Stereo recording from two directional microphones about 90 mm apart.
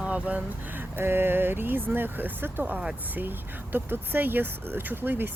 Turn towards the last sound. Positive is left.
turn(degrees=-25)  # may be behind; listen again after turning